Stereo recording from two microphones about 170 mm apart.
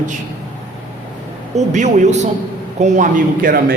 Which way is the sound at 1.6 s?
45° right (ahead or behind).